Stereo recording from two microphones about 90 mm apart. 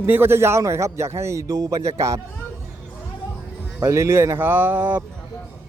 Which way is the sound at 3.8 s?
30° right (ahead or behind).